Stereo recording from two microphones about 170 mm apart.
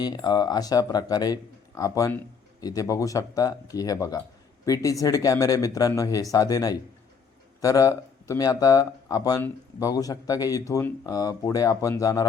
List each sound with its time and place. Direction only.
0.0 s speech: 25° left (ahead or behind)